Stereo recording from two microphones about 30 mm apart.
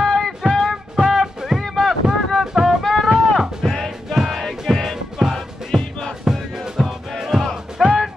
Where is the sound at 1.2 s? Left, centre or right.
Centre.